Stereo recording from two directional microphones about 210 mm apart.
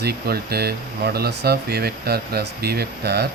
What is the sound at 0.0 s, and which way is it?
Speech, 50° right (ahead or behind).